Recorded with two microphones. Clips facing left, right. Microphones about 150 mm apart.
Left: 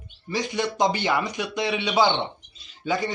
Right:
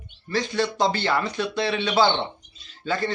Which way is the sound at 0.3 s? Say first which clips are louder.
Right 2 dB; 15° left (ahead or behind).